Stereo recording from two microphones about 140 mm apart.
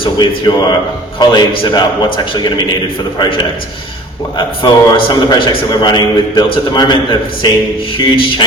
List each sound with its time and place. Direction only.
0.0 s a man's voice: 35° left (ahead or behind)